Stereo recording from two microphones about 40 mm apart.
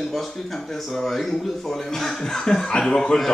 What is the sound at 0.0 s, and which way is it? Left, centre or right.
Speech, centre.